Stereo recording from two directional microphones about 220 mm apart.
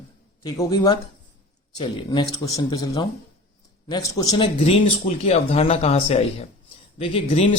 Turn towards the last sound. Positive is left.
turn(degrees=25)  # may be behind; listen again after turning